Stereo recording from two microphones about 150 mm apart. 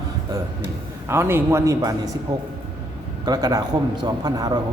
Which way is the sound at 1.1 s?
15° right (ahead or behind).